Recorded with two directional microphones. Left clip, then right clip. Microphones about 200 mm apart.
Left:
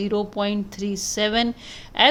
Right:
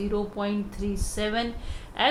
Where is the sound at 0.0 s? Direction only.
40° left (ahead or behind).